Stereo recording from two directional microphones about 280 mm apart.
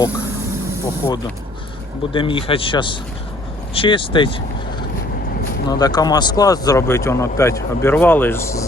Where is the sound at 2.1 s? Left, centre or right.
Centre.